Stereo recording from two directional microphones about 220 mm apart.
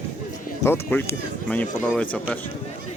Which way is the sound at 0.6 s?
10° left (ahead or behind).